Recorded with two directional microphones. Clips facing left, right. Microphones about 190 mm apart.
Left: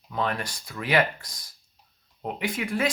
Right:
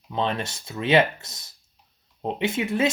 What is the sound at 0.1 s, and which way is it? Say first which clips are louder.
Speech: right 2 dB; 25° right (ahead or behind).